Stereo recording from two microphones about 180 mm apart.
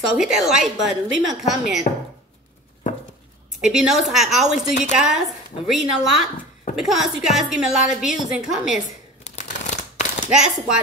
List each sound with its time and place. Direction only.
0.0 s a woman's voice: centre (ahead or behind)
3.6 s a woman's voice: 5° right (ahead or behind)
9.3 s a sound: 40° left (ahead or behind)
10.3 s a woman's voice: 5° right (ahead or behind)